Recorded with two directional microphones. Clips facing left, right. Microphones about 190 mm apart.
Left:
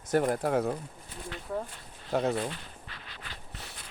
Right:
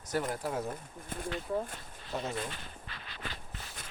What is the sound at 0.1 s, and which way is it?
Speech, 55° left (ahead or behind).